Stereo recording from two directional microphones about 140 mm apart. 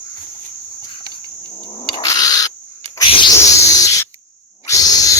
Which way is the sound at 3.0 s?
40° left (ahead or behind).